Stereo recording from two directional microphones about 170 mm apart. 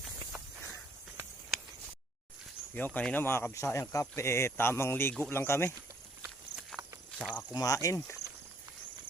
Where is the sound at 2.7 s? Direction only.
10° left (ahead or behind).